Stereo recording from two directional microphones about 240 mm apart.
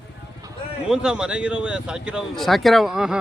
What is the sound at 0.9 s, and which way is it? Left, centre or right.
Speech, centre.